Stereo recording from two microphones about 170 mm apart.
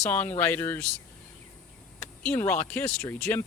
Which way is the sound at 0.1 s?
10° left (ahead or behind).